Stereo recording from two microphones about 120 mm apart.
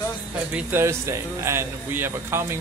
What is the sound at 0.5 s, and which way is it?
Speech, 20° right (ahead or behind).